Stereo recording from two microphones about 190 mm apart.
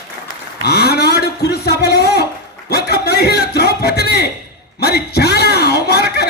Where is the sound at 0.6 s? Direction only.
55° left (ahead or behind).